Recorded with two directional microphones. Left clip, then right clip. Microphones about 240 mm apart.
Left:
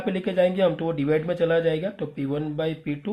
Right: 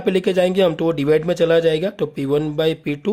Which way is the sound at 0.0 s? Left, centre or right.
Right.